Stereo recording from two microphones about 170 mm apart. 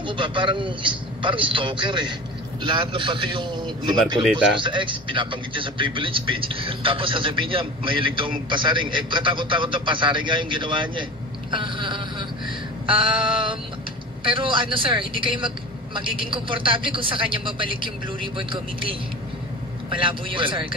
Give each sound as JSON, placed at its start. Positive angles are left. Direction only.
{"t": 0.0, "sound": "a man's voice", "side_deg": -30}
{"t": 4.2, "sound": "speech", "side_deg": -5}
{"t": 4.6, "sound": "a man's voice", "side_deg": -30}
{"t": 20.0, "sound": "a man's voice", "side_deg": -30}